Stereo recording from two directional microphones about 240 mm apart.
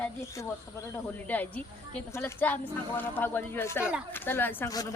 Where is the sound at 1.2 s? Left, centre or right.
Centre.